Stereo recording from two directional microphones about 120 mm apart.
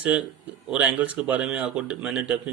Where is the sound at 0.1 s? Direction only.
10° right (ahead or behind).